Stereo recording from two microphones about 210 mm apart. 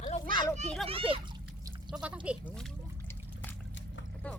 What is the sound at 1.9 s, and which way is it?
Speech, 5° right (ahead or behind).